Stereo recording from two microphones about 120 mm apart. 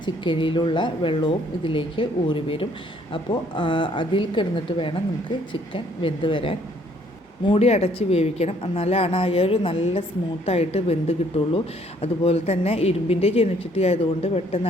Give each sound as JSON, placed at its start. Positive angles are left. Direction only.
{"t": 0.0, "sound": "speech", "side_deg": 40}
{"t": 7.5, "sound": "speech", "side_deg": 60}